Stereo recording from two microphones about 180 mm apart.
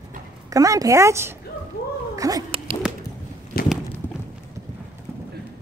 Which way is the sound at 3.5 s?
55° left (ahead or behind).